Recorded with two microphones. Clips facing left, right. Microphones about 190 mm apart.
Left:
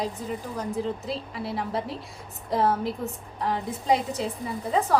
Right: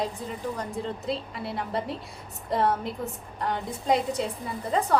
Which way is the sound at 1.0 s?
Centre (ahead or behind).